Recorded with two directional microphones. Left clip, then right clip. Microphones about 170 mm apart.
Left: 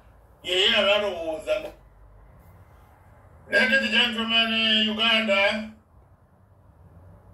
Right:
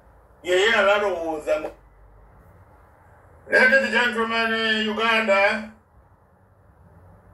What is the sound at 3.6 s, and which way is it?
A man's voice, 25° right (ahead or behind).